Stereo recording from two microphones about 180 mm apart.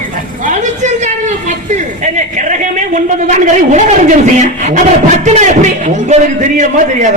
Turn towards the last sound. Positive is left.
turn(degrees=-45)  # may be behind; listen again after turning